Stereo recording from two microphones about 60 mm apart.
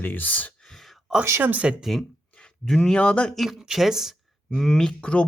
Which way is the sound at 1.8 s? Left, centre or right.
Centre.